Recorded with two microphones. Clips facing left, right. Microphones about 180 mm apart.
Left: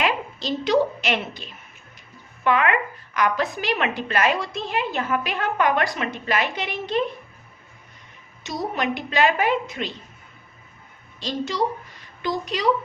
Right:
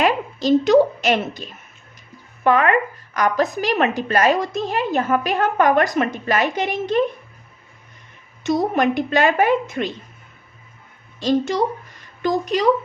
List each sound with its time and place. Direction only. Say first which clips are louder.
0.0 s a woman's voice: right 6 dB; 45° right (ahead or behind)
8.4 s a woman's voice: right 8 dB; 50° right (ahead or behind)
11.2 s a woman's voice: right 6 dB; 50° right (ahead or behind)